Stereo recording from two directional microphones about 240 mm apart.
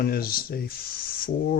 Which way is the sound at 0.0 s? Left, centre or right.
Left.